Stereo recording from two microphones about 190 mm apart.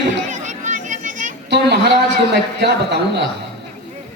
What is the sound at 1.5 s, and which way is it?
A woman's voice, 65° right (ahead or behind).